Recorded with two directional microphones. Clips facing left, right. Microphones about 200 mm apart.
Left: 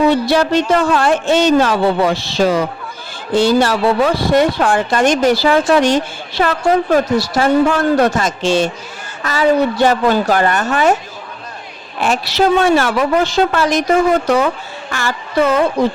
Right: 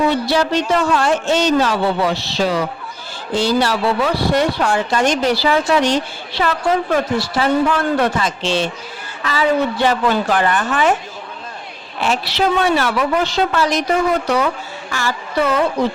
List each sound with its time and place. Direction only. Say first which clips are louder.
0.1 s speech: left 4 dB; 55° left (ahead or behind)
11.9 s speech: left 3 dB; 50° left (ahead or behind)
14.8 s a sound: left 1 dB; 55° left (ahead or behind)